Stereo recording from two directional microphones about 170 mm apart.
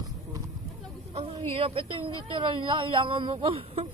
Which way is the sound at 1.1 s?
35° right (ahead or behind).